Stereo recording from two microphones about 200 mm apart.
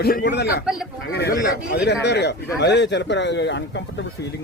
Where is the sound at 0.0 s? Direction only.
50° left (ahead or behind).